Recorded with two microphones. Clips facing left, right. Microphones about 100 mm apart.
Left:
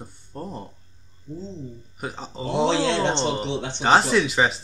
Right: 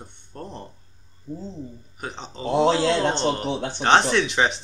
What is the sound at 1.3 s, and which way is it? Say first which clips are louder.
Speech: right 1 dB; 50° right (ahead or behind).